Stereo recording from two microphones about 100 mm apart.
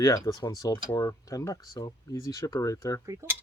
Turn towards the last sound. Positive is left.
turn(degrees=-30)  # may be behind; listen again after turning